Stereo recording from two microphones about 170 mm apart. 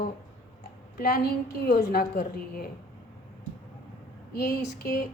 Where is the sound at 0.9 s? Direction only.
65° left (ahead or behind).